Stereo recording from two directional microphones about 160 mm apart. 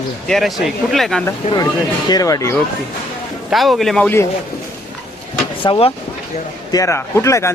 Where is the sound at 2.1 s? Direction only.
20° left (ahead or behind).